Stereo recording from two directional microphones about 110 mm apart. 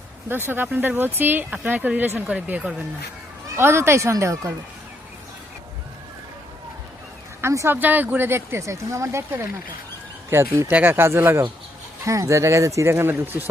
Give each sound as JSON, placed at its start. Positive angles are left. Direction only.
{"t": 0.3, "sound": "speech", "side_deg": -20}
{"t": 3.5, "sound": "speech", "side_deg": -25}
{"t": 7.4, "sound": "speech", "side_deg": -25}